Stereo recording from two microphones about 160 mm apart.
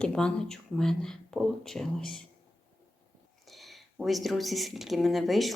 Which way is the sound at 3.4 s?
Centre (ahead or behind).